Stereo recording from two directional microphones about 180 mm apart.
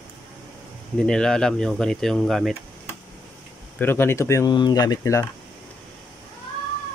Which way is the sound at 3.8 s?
10° left (ahead or behind).